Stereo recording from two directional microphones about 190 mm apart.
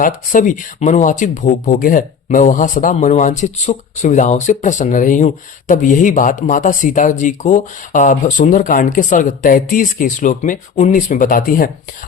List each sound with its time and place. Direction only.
0.0 s speech: 45° left (ahead or behind)